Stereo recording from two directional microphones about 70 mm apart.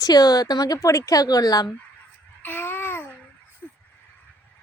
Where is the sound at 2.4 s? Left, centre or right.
Left.